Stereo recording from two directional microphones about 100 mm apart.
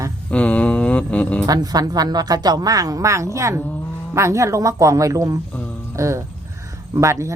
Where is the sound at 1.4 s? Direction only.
40° right (ahead or behind).